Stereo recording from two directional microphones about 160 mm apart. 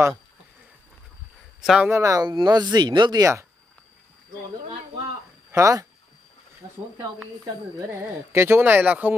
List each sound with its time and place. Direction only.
1.6 s speech: 5° right (ahead or behind)
1.9 s speech: 20° right (ahead or behind)
5.5 s speech: 20° right (ahead or behind)
8.3 s speech: 15° right (ahead or behind)